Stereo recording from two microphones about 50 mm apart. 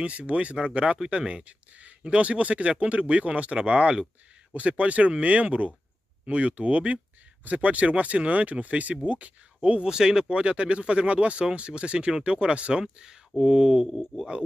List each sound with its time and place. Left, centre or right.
0.0 s speech: right
9.8 s speech: centre
12.8 s mantra: centre